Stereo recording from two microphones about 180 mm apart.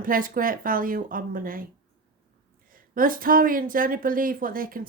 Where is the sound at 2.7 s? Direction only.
50° right (ahead or behind).